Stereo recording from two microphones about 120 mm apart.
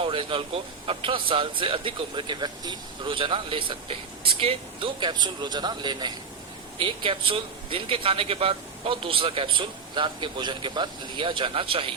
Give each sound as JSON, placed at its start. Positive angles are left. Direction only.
{"t": 0.0, "sound": "a man's voice", "side_deg": -45}